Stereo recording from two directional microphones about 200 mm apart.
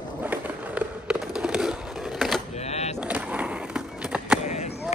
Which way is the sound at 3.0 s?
5° right (ahead or behind).